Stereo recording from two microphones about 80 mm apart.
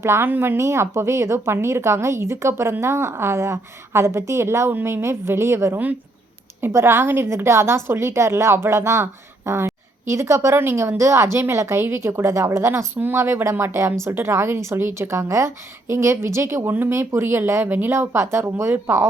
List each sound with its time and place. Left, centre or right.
0.0 s a woman's voice: right